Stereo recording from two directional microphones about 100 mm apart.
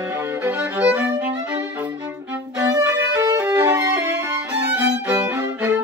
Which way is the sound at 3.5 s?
35° right (ahead or behind).